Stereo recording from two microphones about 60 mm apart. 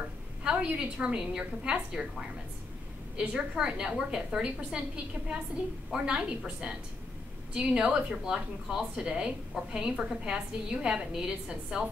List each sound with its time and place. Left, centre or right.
0.4 s a woman's voice: centre
5.9 s a woman's voice: centre